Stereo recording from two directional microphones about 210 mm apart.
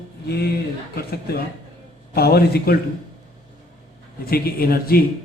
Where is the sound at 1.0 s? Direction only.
50° left (ahead or behind).